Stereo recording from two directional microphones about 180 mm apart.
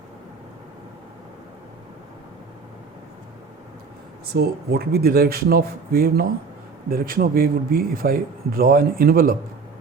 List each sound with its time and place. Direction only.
4.3 s a man's voice: 60° right (ahead or behind)